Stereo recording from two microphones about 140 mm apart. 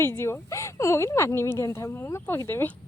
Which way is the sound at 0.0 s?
15° left (ahead or behind).